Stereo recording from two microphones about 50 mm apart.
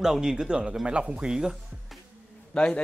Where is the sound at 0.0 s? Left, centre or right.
Centre.